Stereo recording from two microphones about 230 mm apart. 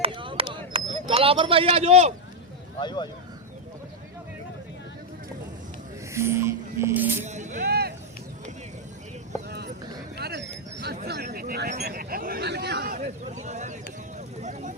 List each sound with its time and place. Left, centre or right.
0.0 s a sound: right
1.0 s speech: right
2.8 s speech: centre
6.1 s music: centre
7.3 s music: right
9.5 s a sound: right